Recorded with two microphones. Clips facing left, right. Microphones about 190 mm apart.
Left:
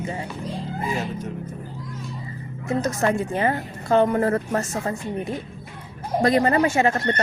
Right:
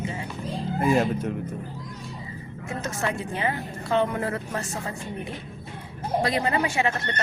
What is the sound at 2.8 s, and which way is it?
A woman's voice, 40° left (ahead or behind).